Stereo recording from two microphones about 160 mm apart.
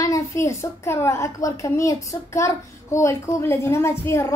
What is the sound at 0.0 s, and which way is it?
A woman's voice, 20° left (ahead or behind).